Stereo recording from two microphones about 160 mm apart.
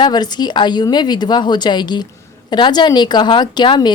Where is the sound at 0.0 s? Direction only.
25° left (ahead or behind).